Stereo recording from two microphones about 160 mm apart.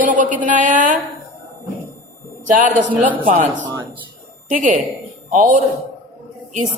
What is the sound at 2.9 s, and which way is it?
Speech, 10° right (ahead or behind).